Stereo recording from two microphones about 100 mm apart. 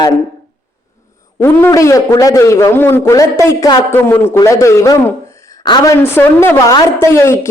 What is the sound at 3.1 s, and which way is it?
Speech, 35° left (ahead or behind).